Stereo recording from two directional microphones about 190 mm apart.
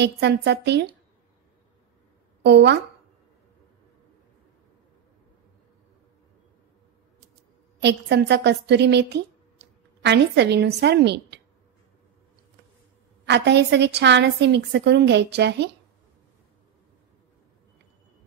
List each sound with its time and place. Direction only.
0.0 s a woman's voice: 65° right (ahead or behind)
2.4 s a woman's voice: 65° right (ahead or behind)
7.8 s a woman's voice: 65° right (ahead or behind)
13.2 s a woman's voice: 60° right (ahead or behind)